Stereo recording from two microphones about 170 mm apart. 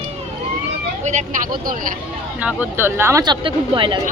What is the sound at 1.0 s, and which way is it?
Speech, 45° right (ahead or behind).